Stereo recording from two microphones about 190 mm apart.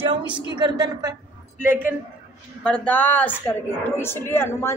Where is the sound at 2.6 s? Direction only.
5° left (ahead or behind).